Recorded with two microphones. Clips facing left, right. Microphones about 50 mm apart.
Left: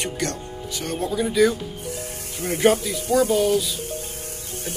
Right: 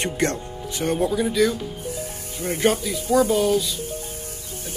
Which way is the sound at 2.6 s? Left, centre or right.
Centre.